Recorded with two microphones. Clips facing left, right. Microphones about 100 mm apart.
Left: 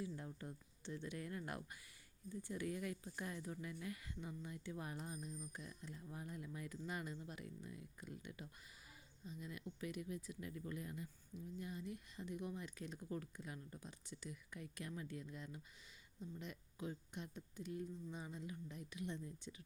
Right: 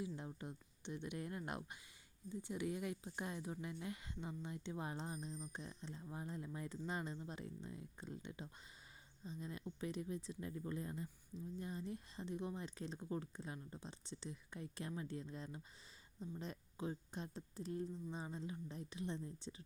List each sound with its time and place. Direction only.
0.0 s speech: 20° right (ahead or behind)